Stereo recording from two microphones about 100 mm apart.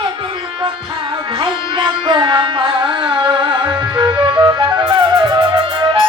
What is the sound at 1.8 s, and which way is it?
Carnatic music, 50° right (ahead or behind).